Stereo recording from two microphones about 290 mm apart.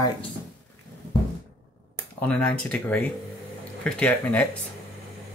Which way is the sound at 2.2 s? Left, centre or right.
Centre.